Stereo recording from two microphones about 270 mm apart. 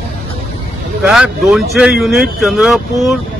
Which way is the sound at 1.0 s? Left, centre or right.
Centre.